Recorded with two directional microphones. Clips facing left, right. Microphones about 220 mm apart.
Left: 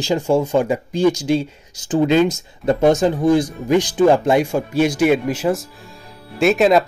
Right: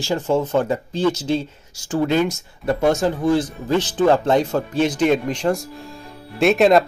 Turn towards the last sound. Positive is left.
turn(degrees=0)  # may be behind; listen again after turning